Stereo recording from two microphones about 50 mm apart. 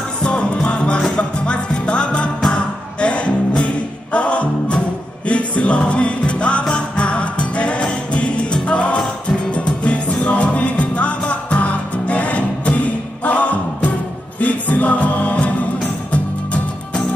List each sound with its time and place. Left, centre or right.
0.2 s music: centre